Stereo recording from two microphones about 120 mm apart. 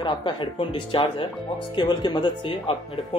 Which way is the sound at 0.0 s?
40° left (ahead or behind).